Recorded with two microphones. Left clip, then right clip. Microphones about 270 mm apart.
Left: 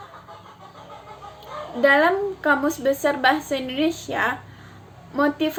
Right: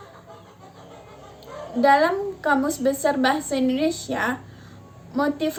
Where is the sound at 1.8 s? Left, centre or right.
Centre.